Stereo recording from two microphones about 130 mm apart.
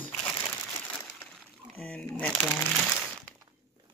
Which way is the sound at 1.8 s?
5° left (ahead or behind).